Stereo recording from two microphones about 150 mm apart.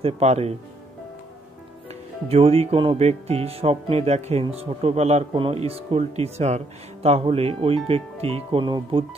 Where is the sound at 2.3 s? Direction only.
45° right (ahead or behind).